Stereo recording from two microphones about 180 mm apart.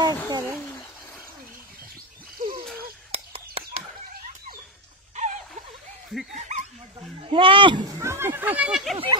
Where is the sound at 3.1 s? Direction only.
35° right (ahead or behind).